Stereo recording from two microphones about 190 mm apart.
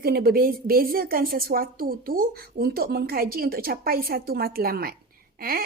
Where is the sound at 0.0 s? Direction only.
55° right (ahead or behind).